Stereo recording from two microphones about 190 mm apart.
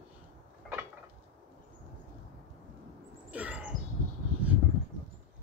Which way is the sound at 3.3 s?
5° right (ahead or behind).